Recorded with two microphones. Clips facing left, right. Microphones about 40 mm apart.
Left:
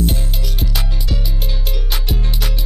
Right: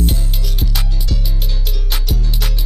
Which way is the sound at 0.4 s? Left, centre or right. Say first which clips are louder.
Even; centre.